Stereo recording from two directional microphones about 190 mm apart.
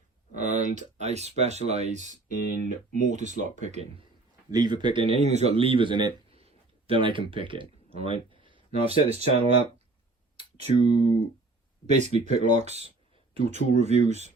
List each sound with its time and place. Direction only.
0.3 s speech: 40° right (ahead or behind)
2.5 s speech: 45° left (ahead or behind)
3.1 s speech: 40° right (ahead or behind)
4.5 s a man's voice: 20° right (ahead or behind)
8.3 s a sound: 25° right (ahead or behind)
10.8 s speech: 25° left (ahead or behind)
11.9 s speech: 35° right (ahead or behind)